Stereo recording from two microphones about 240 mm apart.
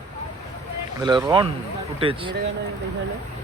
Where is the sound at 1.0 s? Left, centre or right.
Centre.